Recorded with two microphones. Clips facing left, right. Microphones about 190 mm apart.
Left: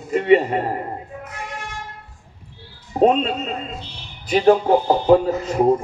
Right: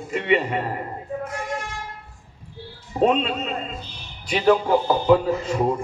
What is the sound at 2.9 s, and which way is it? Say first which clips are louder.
A man's voice: left 3 dB; 40° left (ahead or behind).